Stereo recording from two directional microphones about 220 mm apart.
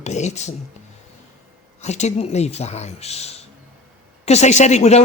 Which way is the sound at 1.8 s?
30° left (ahead or behind).